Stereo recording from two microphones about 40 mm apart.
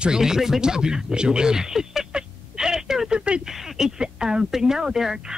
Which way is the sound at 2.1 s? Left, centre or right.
Centre.